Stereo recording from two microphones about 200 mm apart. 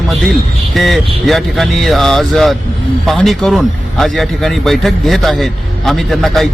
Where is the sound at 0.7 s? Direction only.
Centre (ahead or behind).